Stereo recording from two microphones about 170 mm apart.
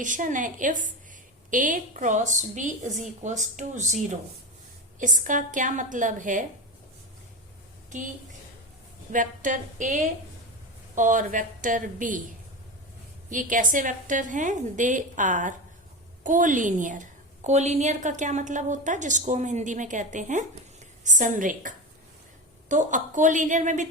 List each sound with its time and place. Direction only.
0.0 s a woman's voice: 50° right (ahead or behind)
9.1 s a woman's voice: 50° right (ahead or behind)
13.3 s a woman's voice: 50° right (ahead or behind)
22.7 s a woman's voice: 45° right (ahead or behind)